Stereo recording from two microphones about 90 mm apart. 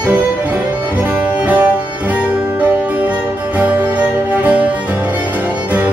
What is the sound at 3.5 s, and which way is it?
Music, 15° right (ahead or behind).